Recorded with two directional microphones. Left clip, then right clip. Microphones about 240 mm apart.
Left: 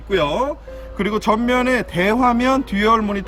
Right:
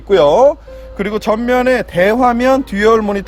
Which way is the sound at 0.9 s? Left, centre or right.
Centre.